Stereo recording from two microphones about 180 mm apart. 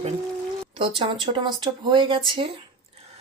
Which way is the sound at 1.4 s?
25° right (ahead or behind).